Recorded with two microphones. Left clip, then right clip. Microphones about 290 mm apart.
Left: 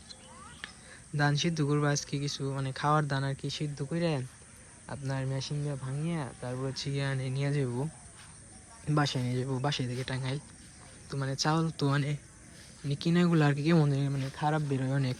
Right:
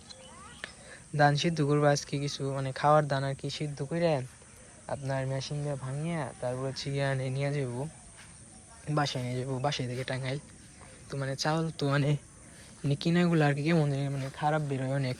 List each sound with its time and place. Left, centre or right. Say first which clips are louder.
0.6 s speech: right 3 dB; centre
8.9 s speech: even; centre
11.9 s speech: right 4 dB; centre